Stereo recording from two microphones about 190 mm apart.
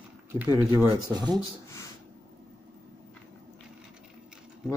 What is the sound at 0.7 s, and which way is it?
Speech, 20° right (ahead or behind).